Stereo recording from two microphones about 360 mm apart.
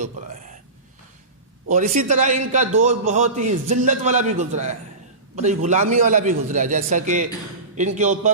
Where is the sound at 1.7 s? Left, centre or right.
Right.